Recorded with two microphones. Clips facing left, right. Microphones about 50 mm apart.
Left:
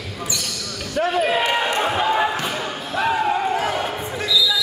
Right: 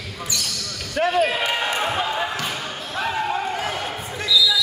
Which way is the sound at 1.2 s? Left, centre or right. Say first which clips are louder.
Left 2 dB; centre.